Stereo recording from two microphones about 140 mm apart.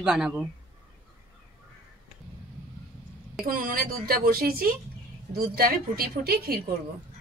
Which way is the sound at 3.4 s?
90° right.